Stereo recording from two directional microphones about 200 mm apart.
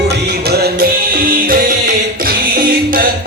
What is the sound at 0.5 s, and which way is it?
Music, 55° right (ahead or behind).